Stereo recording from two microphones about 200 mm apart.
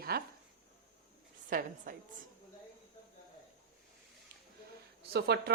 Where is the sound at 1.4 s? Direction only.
45° right (ahead or behind).